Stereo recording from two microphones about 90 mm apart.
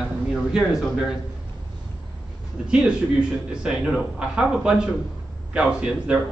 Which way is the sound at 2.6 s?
10° right (ahead or behind).